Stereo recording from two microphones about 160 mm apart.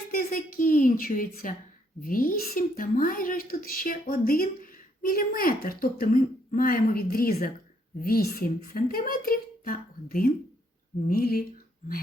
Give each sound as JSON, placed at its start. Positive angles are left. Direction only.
{"t": 0.1, "sound": "a woman's voice", "side_deg": 60}